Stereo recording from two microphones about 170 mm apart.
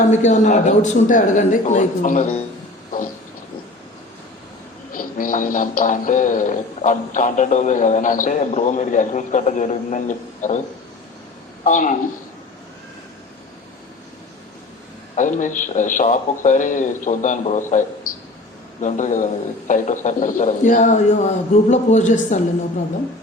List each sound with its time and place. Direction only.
0.0 s music: 45° left (ahead or behind)
4.9 s music: 55° left (ahead or behind)
11.6 s music: 50° left (ahead or behind)
15.1 s music: 50° left (ahead or behind)